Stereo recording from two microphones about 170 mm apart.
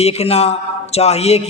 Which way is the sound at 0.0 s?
40° left (ahead or behind).